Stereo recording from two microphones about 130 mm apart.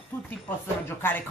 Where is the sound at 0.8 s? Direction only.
15° left (ahead or behind).